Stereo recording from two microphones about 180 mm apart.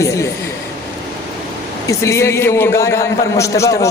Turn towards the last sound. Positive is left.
turn(degrees=15)  # may be behind; listen again after turning